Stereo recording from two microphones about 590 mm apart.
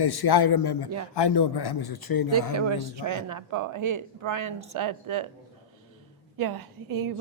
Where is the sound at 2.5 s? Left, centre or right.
Right.